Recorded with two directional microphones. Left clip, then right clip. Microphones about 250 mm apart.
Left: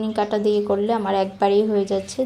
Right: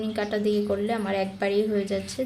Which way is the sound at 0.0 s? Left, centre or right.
Centre.